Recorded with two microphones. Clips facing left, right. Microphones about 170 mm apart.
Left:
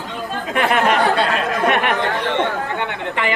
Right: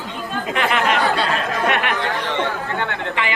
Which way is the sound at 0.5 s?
50° left (ahead or behind).